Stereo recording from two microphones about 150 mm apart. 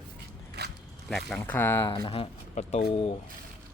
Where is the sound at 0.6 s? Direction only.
90° right.